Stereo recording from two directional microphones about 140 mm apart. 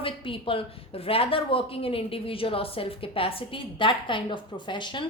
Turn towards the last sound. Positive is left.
turn(degrees=35)  # may be behind; listen again after turning